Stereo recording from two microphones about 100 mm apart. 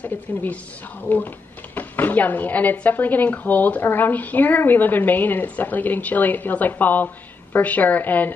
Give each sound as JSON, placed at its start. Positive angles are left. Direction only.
{"t": 0.0, "sound": "speech", "side_deg": 15}